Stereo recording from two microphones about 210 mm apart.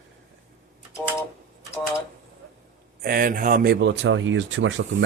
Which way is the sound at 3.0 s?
45° right (ahead or behind).